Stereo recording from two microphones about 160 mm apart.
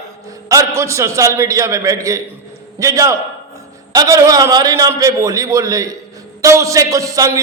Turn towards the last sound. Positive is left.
turn(degrees=-20)  # may be behind; listen again after turning